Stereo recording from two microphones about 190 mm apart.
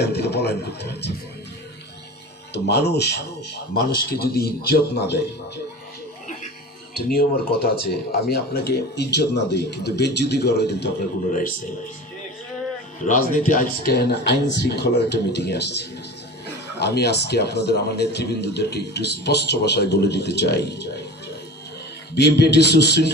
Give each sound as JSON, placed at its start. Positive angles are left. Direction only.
{"t": 0.0, "sound": "a man's voice", "side_deg": 60}
{"t": 2.5, "sound": "a man's voice", "side_deg": 60}
{"t": 6.9, "sound": "a man's voice", "side_deg": 55}
{"t": 11.3, "sound": "speech", "side_deg": 45}
{"t": 13.1, "sound": "speech", "side_deg": 40}
{"t": 13.9, "sound": "a man's voice", "side_deg": 60}
{"t": 22.1, "sound": "a man's voice", "side_deg": 60}